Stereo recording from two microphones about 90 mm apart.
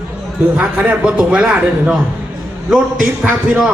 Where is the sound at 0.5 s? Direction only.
10° right (ahead or behind).